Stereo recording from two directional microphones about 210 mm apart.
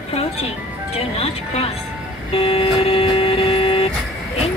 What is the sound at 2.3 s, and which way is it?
Vehicle, 30° left (ahead or behind).